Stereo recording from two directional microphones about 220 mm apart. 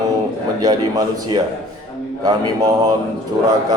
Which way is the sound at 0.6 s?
15° right (ahead or behind).